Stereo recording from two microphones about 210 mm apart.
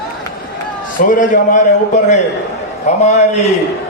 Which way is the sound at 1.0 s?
40° left (ahead or behind).